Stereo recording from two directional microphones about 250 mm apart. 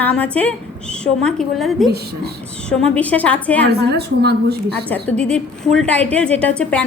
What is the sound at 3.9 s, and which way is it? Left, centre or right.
Speech, right.